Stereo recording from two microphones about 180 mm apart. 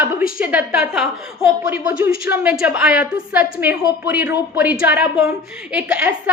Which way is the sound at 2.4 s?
5° right (ahead or behind).